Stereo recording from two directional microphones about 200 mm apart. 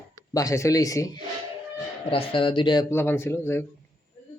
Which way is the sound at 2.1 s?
25° left (ahead or behind).